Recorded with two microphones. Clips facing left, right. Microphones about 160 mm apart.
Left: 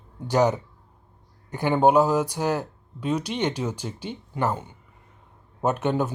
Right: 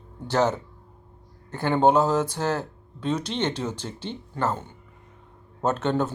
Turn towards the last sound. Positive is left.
turn(degrees=15)  # may be behind; listen again after turning